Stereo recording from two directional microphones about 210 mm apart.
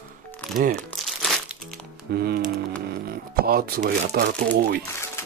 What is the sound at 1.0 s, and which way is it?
Crumpling, centre (ahead or behind).